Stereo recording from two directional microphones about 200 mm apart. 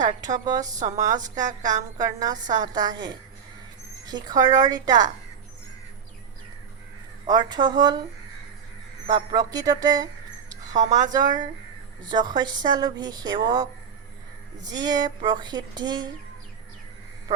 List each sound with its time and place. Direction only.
0.2 s a woman's voice: 20° right (ahead or behind)
7.3 s a woman's voice: 20° right (ahead or behind)
9.1 s a woman's voice: 20° right (ahead or behind)
10.7 s speech: 40° right (ahead or behind)
10.9 s a woman's voice: 20° right (ahead or behind)